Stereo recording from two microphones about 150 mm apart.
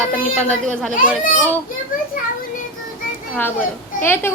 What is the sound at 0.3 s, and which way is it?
Speech, 5° left (ahead or behind).